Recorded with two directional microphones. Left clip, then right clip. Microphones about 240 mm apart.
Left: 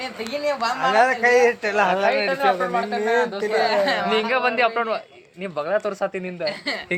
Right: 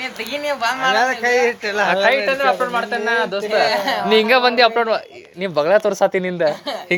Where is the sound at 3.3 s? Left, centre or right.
Right.